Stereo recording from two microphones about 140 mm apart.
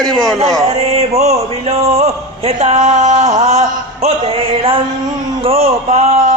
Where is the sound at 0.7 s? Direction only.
45° right (ahead or behind).